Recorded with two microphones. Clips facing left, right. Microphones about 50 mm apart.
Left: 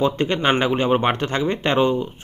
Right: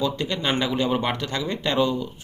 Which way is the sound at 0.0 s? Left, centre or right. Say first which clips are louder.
Left 6 dB; left.